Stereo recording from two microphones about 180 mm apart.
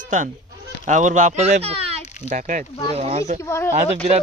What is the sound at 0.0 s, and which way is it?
Speech, 45° right (ahead or behind).